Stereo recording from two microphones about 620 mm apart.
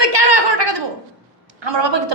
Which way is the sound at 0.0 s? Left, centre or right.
Right.